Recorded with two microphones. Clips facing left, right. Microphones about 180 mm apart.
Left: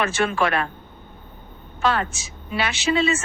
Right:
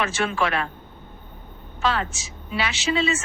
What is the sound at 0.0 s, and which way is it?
Speech, 55° left (ahead or behind).